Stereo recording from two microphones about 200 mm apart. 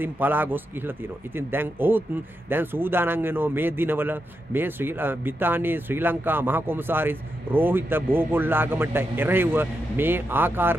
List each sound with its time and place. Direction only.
0.0 s speech: 10° right (ahead or behind)